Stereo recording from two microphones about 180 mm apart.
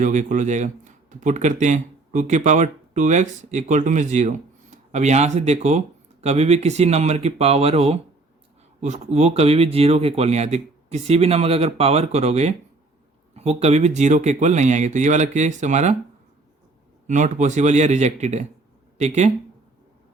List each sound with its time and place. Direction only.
0.0 s speech: 45° right (ahead or behind)
17.1 s speech: 45° right (ahead or behind)